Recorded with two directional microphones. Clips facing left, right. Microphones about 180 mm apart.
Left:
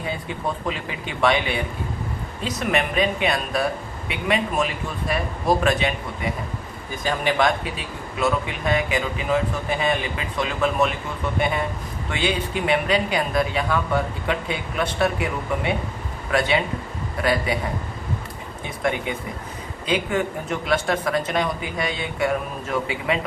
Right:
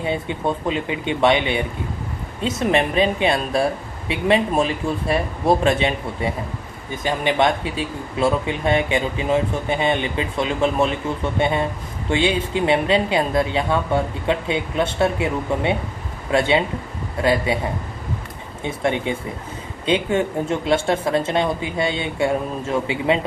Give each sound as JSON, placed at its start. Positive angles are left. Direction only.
{"t": 0.0, "sound": "speech", "side_deg": -25}
{"t": 18.6, "sound": "speech", "side_deg": -25}